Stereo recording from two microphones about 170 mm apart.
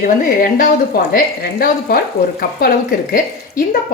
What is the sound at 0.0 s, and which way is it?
A woman's voice, 55° left (ahead or behind).